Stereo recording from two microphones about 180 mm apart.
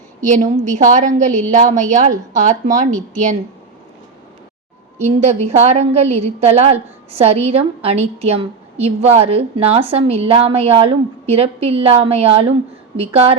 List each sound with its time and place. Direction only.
0.2 s a woman's voice: 45° right (ahead or behind)
4.9 s a woman's voice: 40° right (ahead or behind)